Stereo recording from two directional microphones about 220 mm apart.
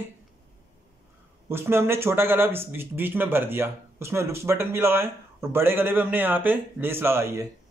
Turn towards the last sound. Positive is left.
turn(degrees=-10)  # may be behind; listen again after turning